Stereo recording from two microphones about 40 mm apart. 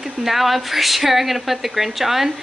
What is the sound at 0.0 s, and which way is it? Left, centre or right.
Speech, centre.